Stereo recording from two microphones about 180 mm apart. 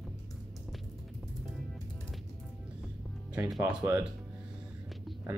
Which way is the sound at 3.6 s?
15° right (ahead or behind).